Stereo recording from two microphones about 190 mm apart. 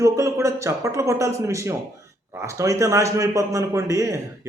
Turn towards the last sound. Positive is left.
turn(degrees=-15)  # may be behind; listen again after turning